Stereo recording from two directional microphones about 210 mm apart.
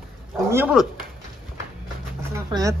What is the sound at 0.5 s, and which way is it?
Speech, 10° right (ahead or behind).